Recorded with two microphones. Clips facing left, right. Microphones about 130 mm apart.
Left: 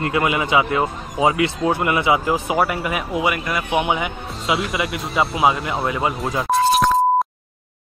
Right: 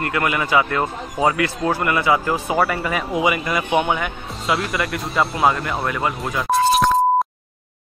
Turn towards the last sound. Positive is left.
turn(degrees=0)  # may be behind; listen again after turning